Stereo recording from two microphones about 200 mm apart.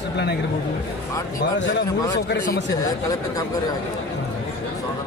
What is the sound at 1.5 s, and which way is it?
Speech, 65° left (ahead or behind).